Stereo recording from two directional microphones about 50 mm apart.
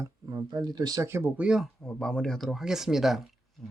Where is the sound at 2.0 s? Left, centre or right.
Centre.